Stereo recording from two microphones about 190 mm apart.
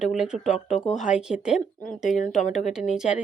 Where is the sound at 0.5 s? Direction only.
40° left (ahead or behind).